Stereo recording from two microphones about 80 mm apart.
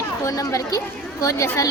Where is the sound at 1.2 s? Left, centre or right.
Left.